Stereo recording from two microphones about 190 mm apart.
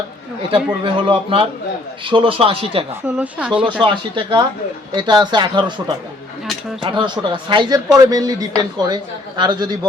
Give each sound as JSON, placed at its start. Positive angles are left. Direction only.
{"t": 0.9, "sound": "a man's voice", "side_deg": -25}
{"t": 3.2, "sound": "speech", "side_deg": -5}
{"t": 3.7, "sound": "a man's voice", "side_deg": -25}
{"t": 6.8, "sound": "a man's voice", "side_deg": -25}